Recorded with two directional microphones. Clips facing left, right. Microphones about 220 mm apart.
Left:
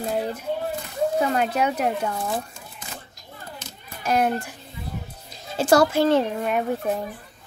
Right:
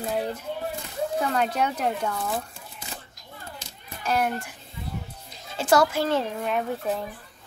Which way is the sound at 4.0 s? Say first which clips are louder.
Left 3 dB; 15° left (ahead or behind).